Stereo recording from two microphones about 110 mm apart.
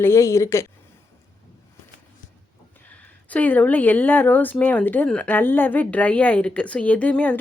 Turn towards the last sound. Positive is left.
turn(degrees=15)  # may be behind; listen again after turning